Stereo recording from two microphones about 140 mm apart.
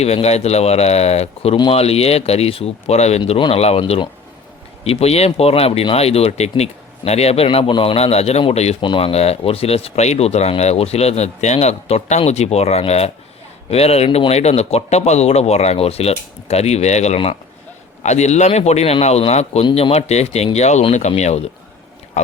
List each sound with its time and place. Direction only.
0.0 s speech: 50° left (ahead or behind)